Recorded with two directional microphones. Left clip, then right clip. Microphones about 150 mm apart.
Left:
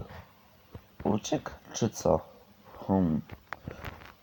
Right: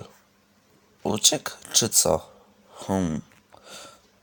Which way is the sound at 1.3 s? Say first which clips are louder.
Right 8 dB; 30° right (ahead or behind).